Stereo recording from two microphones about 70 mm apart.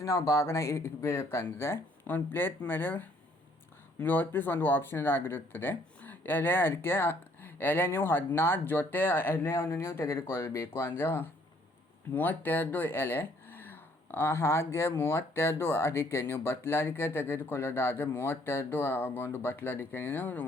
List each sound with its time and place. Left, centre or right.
0.0 s speech: left